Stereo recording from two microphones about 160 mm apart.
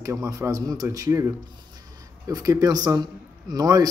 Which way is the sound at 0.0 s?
20° right (ahead or behind).